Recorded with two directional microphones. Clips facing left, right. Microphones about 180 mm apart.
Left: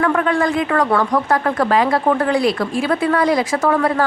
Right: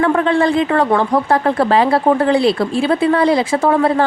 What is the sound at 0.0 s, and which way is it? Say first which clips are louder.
Speech: right 3 dB; 25° right (ahead or behind).